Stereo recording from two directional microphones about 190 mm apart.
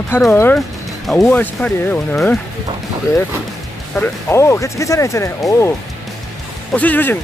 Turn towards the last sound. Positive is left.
turn(degrees=10)  # may be behind; listen again after turning